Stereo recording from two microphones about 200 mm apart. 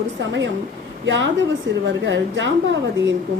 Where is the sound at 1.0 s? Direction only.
70° right (ahead or behind).